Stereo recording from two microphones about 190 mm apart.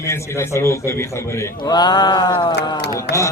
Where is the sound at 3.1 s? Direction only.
60° left (ahead or behind).